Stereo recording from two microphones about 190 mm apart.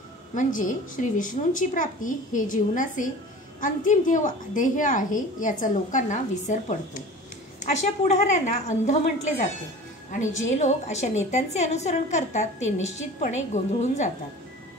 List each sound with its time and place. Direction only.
0.3 s a woman's voice: 45° left (ahead or behind)
10.5 s a woman's voice: 40° left (ahead or behind)